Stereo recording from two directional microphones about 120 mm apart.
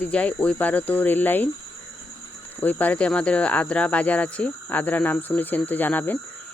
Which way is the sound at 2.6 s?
15° left (ahead or behind).